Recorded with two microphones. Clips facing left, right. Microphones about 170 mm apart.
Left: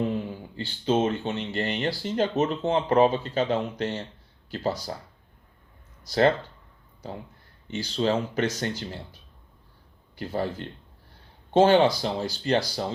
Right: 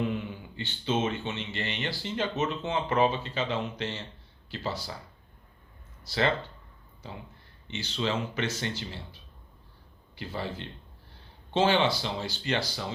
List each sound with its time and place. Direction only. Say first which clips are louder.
0.0 s speech: left 3 dB; 35° left (ahead or behind)
6.1 s speech: left 7 dB; 45° left (ahead or behind)
7.7 s speech: left 6 dB; 40° left (ahead or behind)
10.2 s speech: left 6 dB; 45° left (ahead or behind)